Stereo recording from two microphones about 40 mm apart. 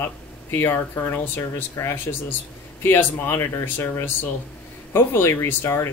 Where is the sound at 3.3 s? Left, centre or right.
Left.